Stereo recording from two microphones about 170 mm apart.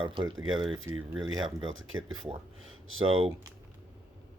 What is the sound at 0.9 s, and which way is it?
Speech, 15° right (ahead or behind).